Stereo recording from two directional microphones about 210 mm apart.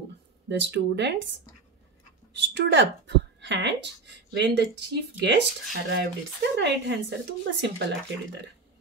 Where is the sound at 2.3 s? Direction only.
55° right (ahead or behind).